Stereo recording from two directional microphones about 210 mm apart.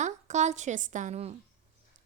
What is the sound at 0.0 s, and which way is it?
A woman's voice, 35° right (ahead or behind).